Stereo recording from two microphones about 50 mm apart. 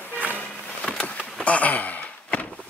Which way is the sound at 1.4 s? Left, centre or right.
Left.